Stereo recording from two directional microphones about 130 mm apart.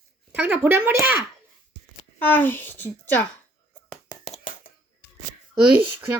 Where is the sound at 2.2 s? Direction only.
15° left (ahead or behind).